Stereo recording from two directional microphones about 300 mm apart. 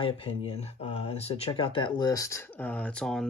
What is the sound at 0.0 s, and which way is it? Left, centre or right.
Speech, centre.